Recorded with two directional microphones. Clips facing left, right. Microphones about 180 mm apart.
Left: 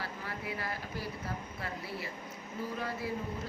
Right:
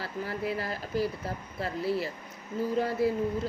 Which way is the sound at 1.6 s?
30° right (ahead or behind).